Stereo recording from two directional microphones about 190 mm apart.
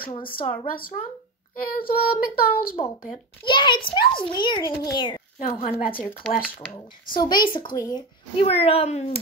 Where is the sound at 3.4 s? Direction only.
25° left (ahead or behind).